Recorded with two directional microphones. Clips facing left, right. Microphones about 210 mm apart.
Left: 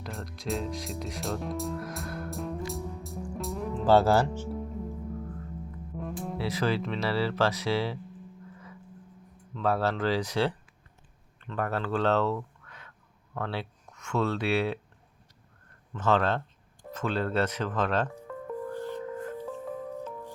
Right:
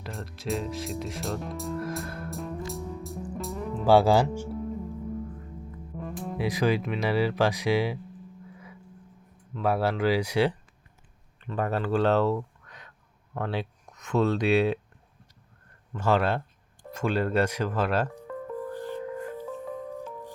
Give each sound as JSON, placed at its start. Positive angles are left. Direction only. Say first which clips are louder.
{"t": 0.0, "sound": "music", "louder": "right 1 dB", "side_deg": 0}
{"t": 3.8, "sound": "speech", "louder": "right 2 dB", "side_deg": -10}
{"t": 6.0, "sound": "music", "louder": "even", "side_deg": 0}
{"t": 6.3, "sound": "speech", "louder": "right 4 dB", "side_deg": -15}
{"t": 9.6, "sound": "speech", "louder": "right 2 dB", "side_deg": -10}
{"t": 15.9, "sound": "speech", "louder": "right 1 dB", "side_deg": -10}
{"t": 18.3, "sound": "music", "louder": "right 1 dB", "side_deg": 0}